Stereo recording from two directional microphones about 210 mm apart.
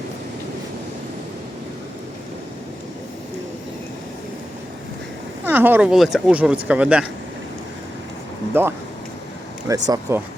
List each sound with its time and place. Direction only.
5.5 s speech: 10° right (ahead or behind)
8.6 s speech: 10° right (ahead or behind)